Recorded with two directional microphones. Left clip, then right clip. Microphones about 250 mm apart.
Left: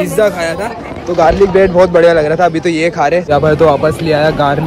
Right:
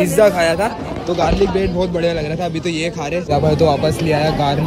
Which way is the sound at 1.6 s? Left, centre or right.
Left.